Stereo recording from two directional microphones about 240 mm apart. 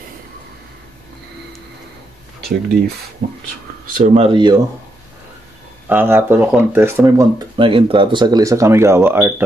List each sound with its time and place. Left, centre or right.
3.2 s speech: right
3.9 s speech: right
5.9 s speech: centre